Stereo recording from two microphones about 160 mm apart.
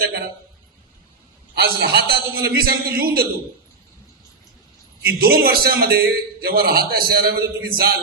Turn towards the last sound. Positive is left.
turn(degrees=-70)  # may be behind; listen again after turning